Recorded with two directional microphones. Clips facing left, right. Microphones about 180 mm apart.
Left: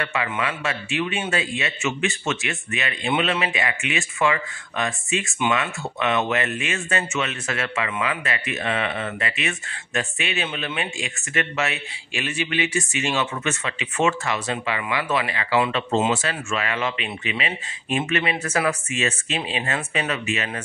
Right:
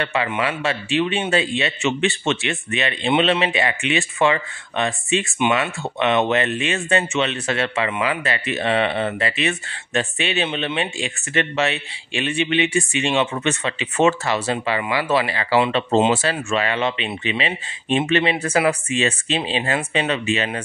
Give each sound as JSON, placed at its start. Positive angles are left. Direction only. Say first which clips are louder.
{"t": 0.0, "sound": "a man's voice", "louder": "right 4 dB", "side_deg": -30}